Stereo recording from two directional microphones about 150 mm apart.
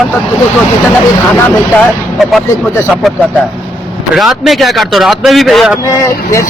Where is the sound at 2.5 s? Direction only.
15° left (ahead or behind).